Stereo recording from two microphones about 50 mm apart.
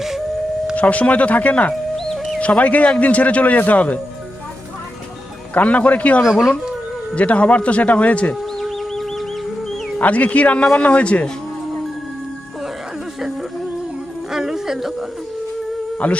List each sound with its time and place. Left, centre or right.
0.8 s speech: left
2.0 s music: centre
2.4 s speech: left
5.5 s speech: left
6.2 s speech: centre
7.2 s speech: left
8.6 s music: centre
10.0 s speech: left
14.3 s music: centre
16.0 s speech: left